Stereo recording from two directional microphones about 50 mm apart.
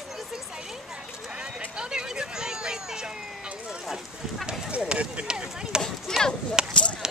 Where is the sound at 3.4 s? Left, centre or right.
Centre.